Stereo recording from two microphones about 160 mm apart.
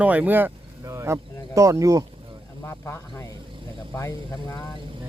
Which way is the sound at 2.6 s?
15° left (ahead or behind).